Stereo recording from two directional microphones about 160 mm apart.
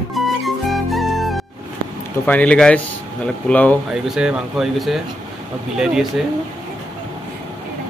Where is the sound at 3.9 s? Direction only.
5° right (ahead or behind).